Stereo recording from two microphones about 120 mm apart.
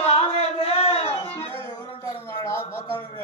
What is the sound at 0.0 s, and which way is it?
Music, 55° left (ahead or behind).